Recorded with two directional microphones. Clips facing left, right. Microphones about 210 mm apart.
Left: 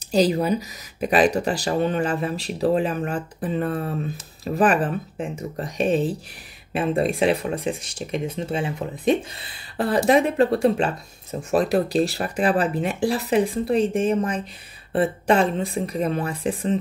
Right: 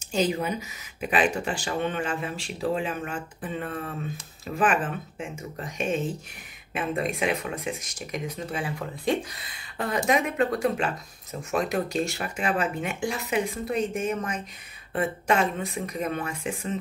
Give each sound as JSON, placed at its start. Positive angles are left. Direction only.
{"t": 0.1, "sound": "speech", "side_deg": 35}
{"t": 9.5, "sound": "speech", "side_deg": 35}